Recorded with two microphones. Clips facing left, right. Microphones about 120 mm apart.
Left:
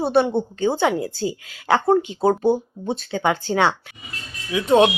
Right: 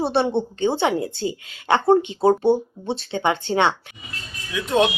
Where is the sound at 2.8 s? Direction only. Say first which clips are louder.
Left 2 dB; 25° right (ahead or behind).